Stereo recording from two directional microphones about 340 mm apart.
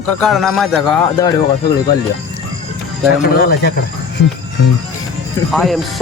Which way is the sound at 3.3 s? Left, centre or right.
Left.